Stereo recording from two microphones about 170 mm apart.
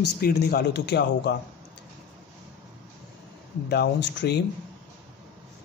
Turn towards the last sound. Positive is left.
turn(degrees=80)